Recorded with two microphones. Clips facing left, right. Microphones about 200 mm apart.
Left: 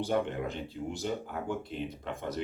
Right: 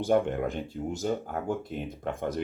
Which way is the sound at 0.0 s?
50° right (ahead or behind).